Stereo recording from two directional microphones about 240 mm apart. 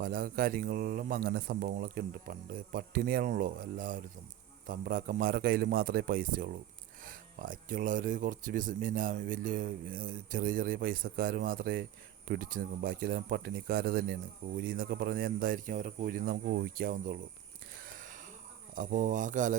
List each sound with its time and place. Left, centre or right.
0.0 s speech: right
18.7 s speech: right